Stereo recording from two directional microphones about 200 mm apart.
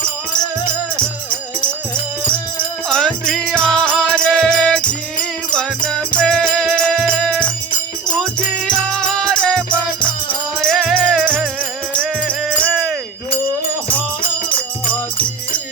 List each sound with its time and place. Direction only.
2.2 s music: 25° left (ahead or behind)
2.9 s music: 5° left (ahead or behind)
9.6 s music: 25° left (ahead or behind)
10.6 s music: centre (ahead or behind)
12.5 s music: 5° left (ahead or behind)
14.2 s music: 25° left (ahead or behind)